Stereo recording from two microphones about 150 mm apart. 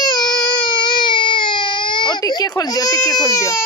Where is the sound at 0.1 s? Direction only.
30° left (ahead or behind).